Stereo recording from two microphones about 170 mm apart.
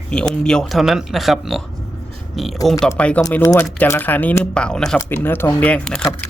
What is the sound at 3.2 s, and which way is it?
Speech, 20° left (ahead or behind).